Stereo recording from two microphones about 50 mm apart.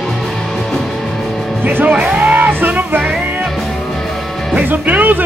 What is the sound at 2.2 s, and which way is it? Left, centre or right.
Music, right.